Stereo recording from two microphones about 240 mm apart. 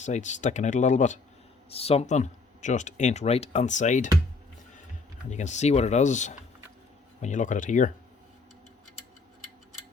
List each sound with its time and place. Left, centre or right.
0.0 s speech: left
5.3 s speech: left